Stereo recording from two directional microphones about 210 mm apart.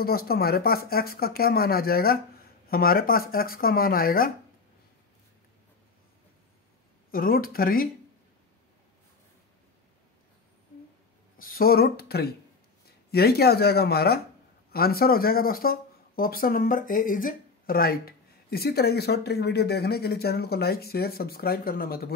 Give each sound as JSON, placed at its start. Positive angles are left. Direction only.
{"t": 0.0, "sound": "speech", "side_deg": 45}
{"t": 7.1, "sound": "speech", "side_deg": 45}
{"t": 11.3, "sound": "speech", "side_deg": 45}